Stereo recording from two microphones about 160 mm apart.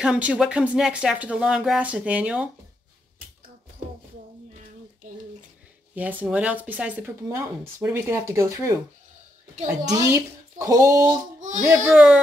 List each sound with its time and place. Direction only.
0.0 s speech: 5° right (ahead or behind)
5.9 s speech: 10° right (ahead or behind)
9.8 s speech: 20° right (ahead or behind)
11.3 s baby cry: 50° right (ahead or behind)
11.9 s speech: 5° right (ahead or behind)